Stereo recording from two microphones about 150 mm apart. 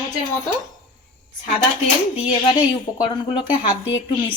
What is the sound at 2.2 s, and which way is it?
Speech, 35° left (ahead or behind).